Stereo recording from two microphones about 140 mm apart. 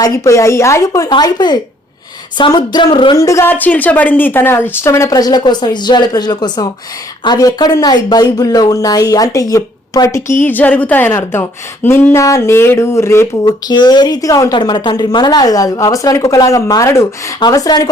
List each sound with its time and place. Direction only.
0.0 s speech: 20° left (ahead or behind)
2.4 s a sound: 30° left (ahead or behind)
3.2 s speech: 20° left (ahead or behind)
13.4 s speech: 30° left (ahead or behind)